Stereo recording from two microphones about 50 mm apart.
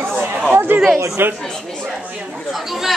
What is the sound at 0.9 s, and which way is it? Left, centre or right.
Speech, right.